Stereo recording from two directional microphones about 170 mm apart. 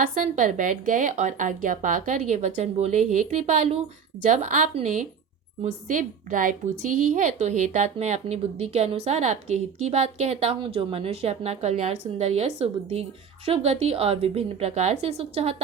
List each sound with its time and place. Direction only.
0.0 s a woman's voice: 50° right (ahead or behind)